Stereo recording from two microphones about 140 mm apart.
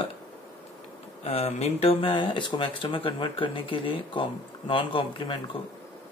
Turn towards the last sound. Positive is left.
turn(degrees=35)  # may be behind; listen again after turning